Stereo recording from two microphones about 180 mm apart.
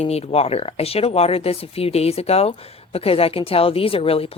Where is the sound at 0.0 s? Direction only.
35° left (ahead or behind).